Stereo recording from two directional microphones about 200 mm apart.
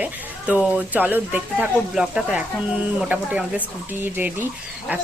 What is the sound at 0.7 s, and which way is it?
Speech, 10° right (ahead or behind).